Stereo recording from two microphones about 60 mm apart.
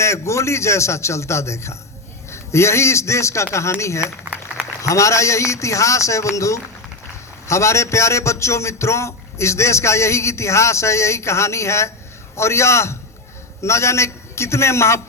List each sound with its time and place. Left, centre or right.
0.0 s a man's voice: left